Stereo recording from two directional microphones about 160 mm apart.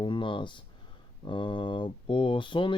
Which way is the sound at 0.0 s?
30° left (ahead or behind).